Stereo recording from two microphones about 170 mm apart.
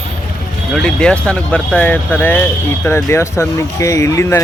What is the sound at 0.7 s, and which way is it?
Speech, 5° left (ahead or behind).